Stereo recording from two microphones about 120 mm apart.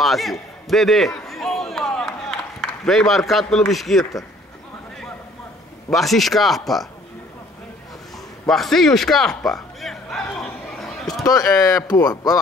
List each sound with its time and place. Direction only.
0.0 s a man's voice: centre (ahead or behind)
1.2 s a sound: centre (ahead or behind)
2.8 s a man's voice: 5° left (ahead or behind)
5.9 s a man's voice: centre (ahead or behind)
8.5 s a man's voice: centre (ahead or behind)
11.2 s speech: 30° left (ahead or behind)